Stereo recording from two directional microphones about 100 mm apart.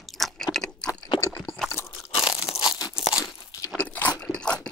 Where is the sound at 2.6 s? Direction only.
40° left (ahead or behind).